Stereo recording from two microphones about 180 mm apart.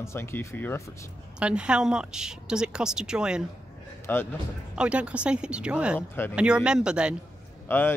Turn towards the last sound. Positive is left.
turn(degrees=10)  # may be behind; listen again after turning